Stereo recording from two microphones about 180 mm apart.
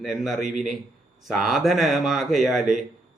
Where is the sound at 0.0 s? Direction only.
Centre (ahead or behind).